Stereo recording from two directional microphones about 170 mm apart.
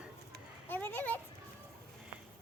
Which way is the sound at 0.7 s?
10° left (ahead or behind).